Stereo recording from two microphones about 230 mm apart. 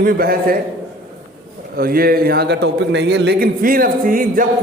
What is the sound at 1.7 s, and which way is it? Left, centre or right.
A man's voice, right.